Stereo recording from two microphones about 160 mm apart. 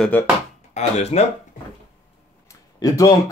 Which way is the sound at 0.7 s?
45° left (ahead or behind).